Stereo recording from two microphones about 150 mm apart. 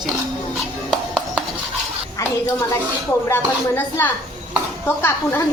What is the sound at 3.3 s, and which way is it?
A woman's voice, 15° left (ahead or behind).